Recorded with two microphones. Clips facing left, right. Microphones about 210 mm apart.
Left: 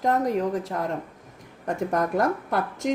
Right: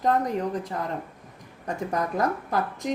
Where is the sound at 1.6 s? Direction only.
50° left (ahead or behind).